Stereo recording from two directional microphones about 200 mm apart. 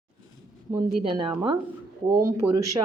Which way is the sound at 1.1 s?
25° right (ahead or behind).